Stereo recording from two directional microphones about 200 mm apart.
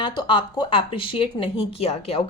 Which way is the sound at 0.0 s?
25° left (ahead or behind).